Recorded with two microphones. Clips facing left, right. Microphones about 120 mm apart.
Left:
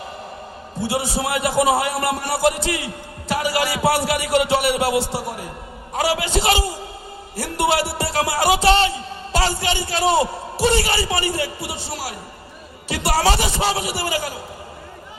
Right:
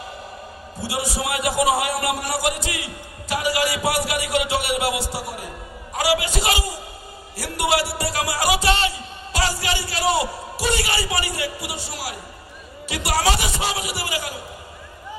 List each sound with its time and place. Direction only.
0.8 s a man's voice: 25° left (ahead or behind)